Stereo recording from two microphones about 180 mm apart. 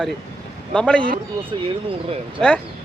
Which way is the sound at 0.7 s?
5° left (ahead or behind).